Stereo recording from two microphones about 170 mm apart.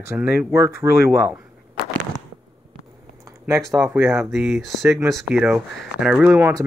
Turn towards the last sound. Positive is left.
turn(degrees=-10)  # may be behind; listen again after turning